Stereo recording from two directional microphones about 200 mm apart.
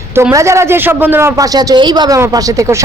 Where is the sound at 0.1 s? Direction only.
15° right (ahead or behind).